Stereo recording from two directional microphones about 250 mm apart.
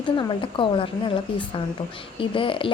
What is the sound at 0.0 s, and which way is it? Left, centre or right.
A woman's voice, centre.